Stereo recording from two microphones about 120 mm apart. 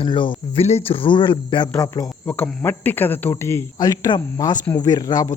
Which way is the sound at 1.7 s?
25° left (ahead or behind).